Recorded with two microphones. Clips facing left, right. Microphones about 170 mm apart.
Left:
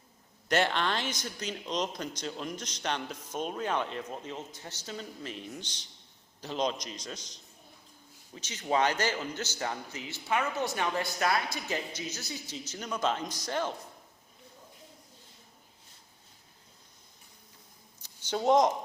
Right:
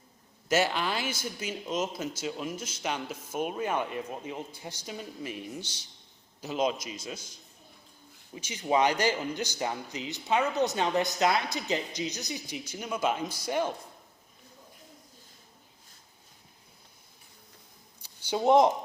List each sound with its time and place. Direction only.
0.4 s speech: 5° right (ahead or behind)
8.4 s speech: 10° right (ahead or behind)
18.0 s a sound: 10° right (ahead or behind)